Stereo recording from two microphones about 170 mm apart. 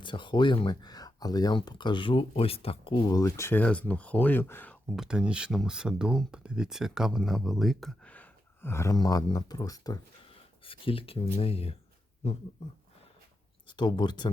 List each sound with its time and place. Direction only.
0.0 s speech: 30° left (ahead or behind); by 4.8 s 10° left (ahead or behind)
4.9 s speech: 5° right (ahead or behind); by 11.8 s 35° left (ahead or behind)
12.2 s a sound: 40° left (ahead or behind)
13.7 s speech: 25° left (ahead or behind)